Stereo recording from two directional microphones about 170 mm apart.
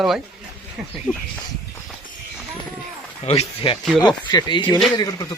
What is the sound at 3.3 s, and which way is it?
Speech, 35° left (ahead or behind).